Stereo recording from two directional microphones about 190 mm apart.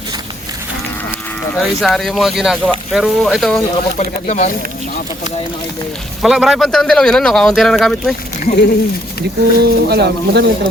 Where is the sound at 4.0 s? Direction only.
35° left (ahead or behind).